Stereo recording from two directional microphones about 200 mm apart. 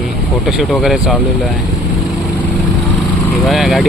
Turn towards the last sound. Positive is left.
turn(degrees=0)  # may be behind; listen again after turning